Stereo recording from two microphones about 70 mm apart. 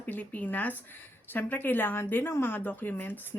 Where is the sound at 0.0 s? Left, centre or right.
Left.